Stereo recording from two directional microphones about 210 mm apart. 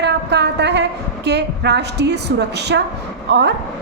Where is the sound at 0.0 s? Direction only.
55° right (ahead or behind).